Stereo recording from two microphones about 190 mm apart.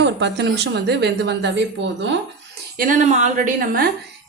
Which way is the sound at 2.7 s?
45° right (ahead or behind).